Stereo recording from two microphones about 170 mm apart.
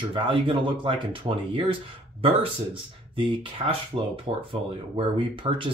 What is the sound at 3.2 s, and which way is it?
Speech, 35° right (ahead or behind).